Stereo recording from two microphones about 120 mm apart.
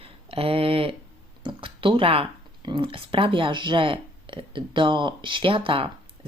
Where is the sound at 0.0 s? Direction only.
50° right (ahead or behind).